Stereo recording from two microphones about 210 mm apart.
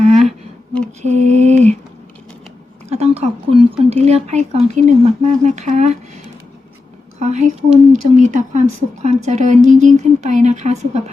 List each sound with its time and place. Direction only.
0.0 s a sound: 30° right (ahead or behind)
1.0 s speech: 35° right (ahead or behind)
2.9 s speech: 30° right (ahead or behind)
7.2 s speech: 35° right (ahead or behind)